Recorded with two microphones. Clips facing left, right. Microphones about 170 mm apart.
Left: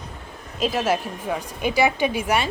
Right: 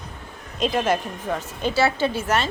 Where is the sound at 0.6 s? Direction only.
5° left (ahead or behind).